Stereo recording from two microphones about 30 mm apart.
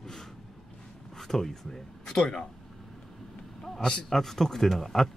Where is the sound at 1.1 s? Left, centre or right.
Centre.